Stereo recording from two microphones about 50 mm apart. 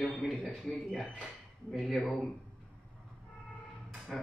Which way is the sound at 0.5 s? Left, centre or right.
Left.